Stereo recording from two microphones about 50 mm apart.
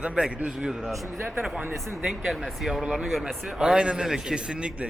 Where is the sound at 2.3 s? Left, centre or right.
Centre; by 4.8 s right.